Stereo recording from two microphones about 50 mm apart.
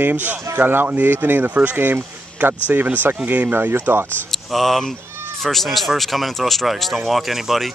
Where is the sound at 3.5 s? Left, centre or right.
Right.